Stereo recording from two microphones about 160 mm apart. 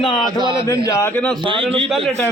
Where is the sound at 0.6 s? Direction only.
20° left (ahead or behind).